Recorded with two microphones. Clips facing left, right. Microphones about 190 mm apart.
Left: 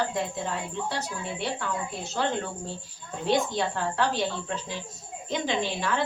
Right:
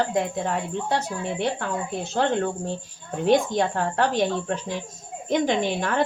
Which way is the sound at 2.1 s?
50° right (ahead or behind).